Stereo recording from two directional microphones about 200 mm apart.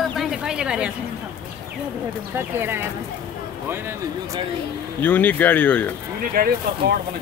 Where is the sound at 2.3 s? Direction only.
10° right (ahead or behind).